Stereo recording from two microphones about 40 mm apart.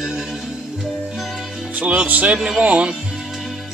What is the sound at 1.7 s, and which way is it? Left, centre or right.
Speech, right.